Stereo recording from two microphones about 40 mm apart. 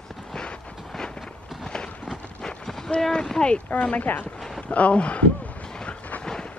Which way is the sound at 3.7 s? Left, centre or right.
Left.